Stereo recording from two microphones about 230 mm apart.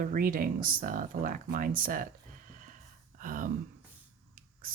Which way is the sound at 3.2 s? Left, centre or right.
Right.